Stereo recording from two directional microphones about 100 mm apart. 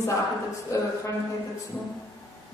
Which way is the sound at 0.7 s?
30° left (ahead or behind).